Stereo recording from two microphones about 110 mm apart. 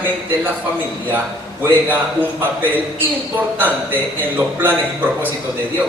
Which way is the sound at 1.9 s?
15° right (ahead or behind).